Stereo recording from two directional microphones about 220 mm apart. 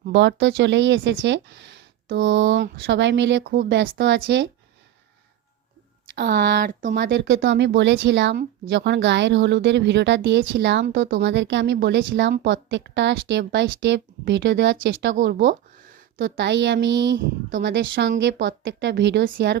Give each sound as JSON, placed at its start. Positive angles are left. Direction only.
{"t": 0.1, "sound": "speech", "side_deg": -55}
{"t": 6.1, "sound": "a woman's voice", "side_deg": -50}
{"t": 15.1, "sound": "speech", "side_deg": -40}
{"t": 16.3, "sound": "speech", "side_deg": -55}